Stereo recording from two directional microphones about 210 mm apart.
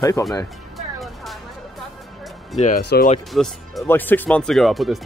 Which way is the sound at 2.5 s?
35° left (ahead or behind).